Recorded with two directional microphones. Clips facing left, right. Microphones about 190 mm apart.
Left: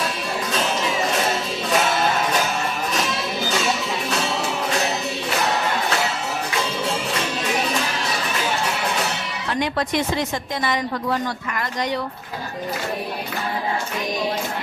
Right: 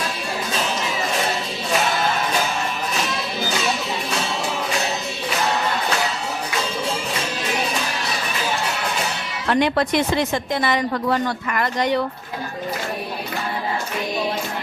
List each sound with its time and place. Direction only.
9.5 s a woman's voice: 65° right (ahead or behind)